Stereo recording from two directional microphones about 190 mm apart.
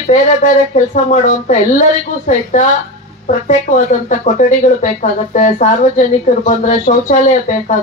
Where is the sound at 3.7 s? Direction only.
40° left (ahead or behind).